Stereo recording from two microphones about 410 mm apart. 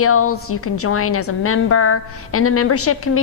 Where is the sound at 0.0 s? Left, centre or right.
Left.